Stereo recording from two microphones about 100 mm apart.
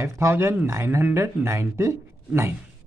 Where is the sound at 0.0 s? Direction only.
25° right (ahead or behind).